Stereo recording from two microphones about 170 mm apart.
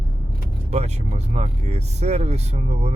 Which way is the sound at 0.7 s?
40° right (ahead or behind).